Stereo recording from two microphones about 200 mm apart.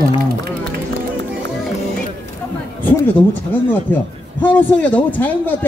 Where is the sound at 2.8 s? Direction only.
10° left (ahead or behind).